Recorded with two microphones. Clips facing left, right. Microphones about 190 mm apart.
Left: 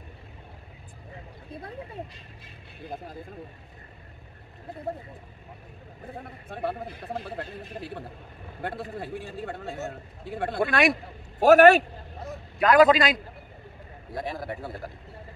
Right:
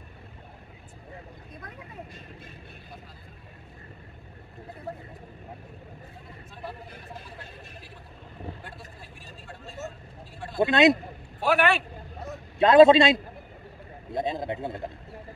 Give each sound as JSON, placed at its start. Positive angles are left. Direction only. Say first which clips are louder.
{"t": 1.5, "sound": "vehicle", "louder": "left 9 dB", "side_deg": 30}
{"t": 6.1, "sound": "speech", "louder": "left 7 dB", "side_deg": 60}
{"t": 10.6, "sound": "a man's voice", "louder": "right 4 dB", "side_deg": -20}
{"t": 11.3, "sound": "a man's voice", "louder": "left 9 dB", "side_deg": 45}
{"t": 12.5, "sound": "a man's voice", "louder": "right 3 dB", "side_deg": -25}